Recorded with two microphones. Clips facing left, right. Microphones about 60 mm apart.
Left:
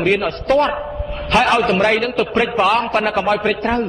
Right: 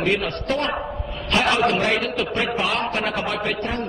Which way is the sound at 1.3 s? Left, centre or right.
Left.